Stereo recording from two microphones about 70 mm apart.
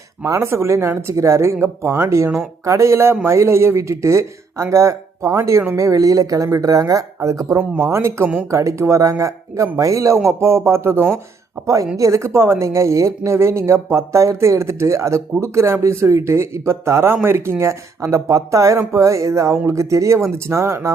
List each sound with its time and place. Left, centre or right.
0.3 s speech: right
11.6 s speech: right